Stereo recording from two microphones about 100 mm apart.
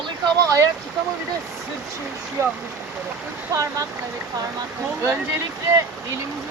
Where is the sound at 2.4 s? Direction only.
30° right (ahead or behind).